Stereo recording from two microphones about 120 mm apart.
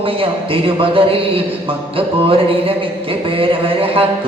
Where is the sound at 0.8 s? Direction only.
50° right (ahead or behind).